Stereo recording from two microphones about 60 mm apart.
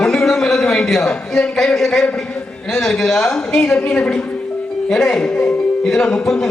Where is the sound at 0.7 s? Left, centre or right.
Centre.